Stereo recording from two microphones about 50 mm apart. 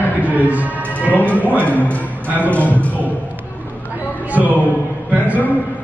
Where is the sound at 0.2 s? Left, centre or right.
Right.